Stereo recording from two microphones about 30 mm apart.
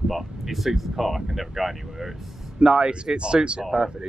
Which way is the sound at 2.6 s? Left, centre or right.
Right.